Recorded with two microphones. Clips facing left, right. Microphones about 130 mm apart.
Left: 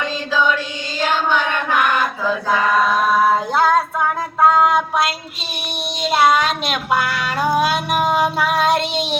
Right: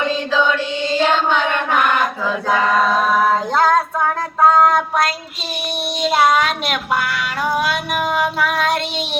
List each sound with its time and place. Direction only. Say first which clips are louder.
3.2 s female singing: even; 5° left (ahead or behind)
4.4 s a sound: right 1 dB; 5° left (ahead or behind)
7.1 s music: left 2 dB; 35° left (ahead or behind)